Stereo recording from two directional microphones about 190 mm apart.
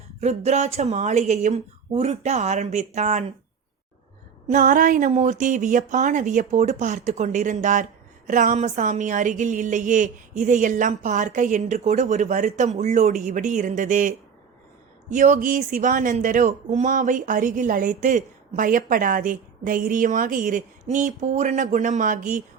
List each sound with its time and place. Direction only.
0.2 s a woman's voice: 35° right (ahead or behind)
4.4 s a woman's voice: 45° right (ahead or behind)
15.1 s speech: 40° right (ahead or behind)